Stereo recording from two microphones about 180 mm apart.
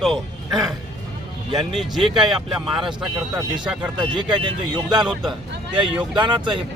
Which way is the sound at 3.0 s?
25° right (ahead or behind).